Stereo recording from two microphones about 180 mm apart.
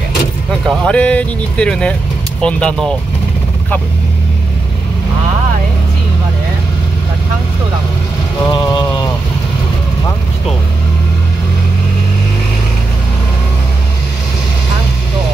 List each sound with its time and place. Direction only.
0.5 s speech: 5° left (ahead or behind)
8.5 s vehicle: 25° left (ahead or behind)